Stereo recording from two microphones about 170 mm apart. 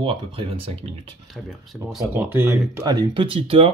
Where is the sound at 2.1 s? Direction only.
10° right (ahead or behind); by 3.7 s 30° right (ahead or behind).